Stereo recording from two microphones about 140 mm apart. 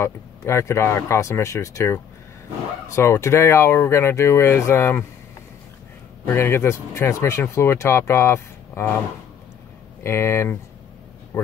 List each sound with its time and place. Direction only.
0.4 s speech: 20° left (ahead or behind)
6.2 s speech: 15° left (ahead or behind)
10.0 s speech: 20° left (ahead or behind)